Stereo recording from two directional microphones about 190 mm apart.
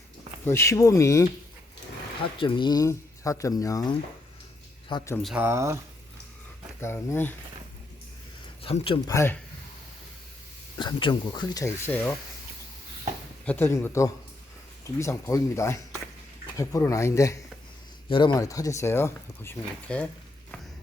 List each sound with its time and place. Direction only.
0.4 s speech: 15° left (ahead or behind)
2.4 s speech: 25° left (ahead or behind)
5.1 s speech: centre (ahead or behind)
5.4 s speech: 15° right (ahead or behind)
6.8 s speech: 10° left (ahead or behind)
8.6 s speech: 30° left (ahead or behind)
9.0 s speech: 15° left (ahead or behind)
10.8 s speech: 25° left (ahead or behind)
13.4 s speech: 10° left (ahead or behind)